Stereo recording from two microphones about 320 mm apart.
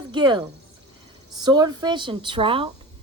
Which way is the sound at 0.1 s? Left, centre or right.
Centre.